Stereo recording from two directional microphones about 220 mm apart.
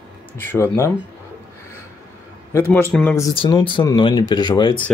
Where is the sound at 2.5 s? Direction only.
10° left (ahead or behind).